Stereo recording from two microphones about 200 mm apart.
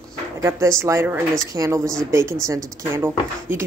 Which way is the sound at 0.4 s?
15° right (ahead or behind).